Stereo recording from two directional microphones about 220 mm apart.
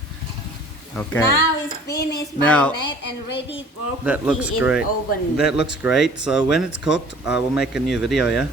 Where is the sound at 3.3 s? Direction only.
50° left (ahead or behind).